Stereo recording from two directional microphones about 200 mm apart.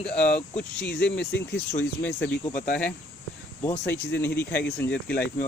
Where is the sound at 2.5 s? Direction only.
40° left (ahead or behind).